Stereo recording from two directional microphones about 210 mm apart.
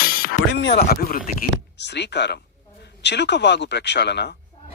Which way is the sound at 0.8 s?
45° left (ahead or behind).